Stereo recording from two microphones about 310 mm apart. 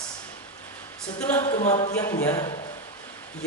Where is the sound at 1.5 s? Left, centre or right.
Left.